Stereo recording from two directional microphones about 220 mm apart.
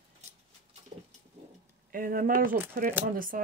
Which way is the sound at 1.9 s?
40° right (ahead or behind).